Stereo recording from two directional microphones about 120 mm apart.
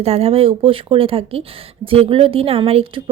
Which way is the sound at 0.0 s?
55° right (ahead or behind).